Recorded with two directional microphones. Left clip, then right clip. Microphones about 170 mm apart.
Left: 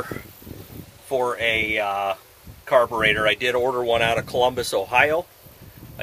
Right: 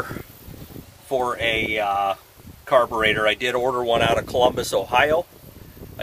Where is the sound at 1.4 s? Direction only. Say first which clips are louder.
Even; 15° right (ahead or behind).